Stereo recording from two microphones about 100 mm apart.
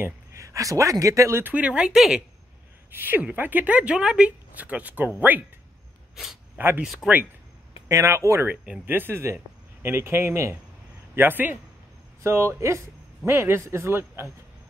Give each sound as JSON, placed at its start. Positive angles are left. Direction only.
{"t": 0.0, "sound": "speech", "side_deg": -30}
{"t": 1.4, "sound": "a woman's voice", "side_deg": -15}
{"t": 2.9, "sound": "a woman's voice", "side_deg": -20}
{"t": 6.8, "sound": "speech", "side_deg": 0}
{"t": 7.9, "sound": "speech", "side_deg": -30}
{"t": 8.5, "sound": "speech", "side_deg": -15}